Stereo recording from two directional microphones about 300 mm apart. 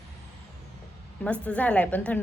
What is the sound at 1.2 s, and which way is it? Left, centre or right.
A woman's voice, centre.